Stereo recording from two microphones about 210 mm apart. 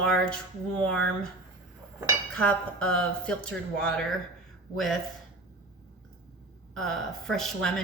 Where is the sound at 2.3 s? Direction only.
5° left (ahead or behind).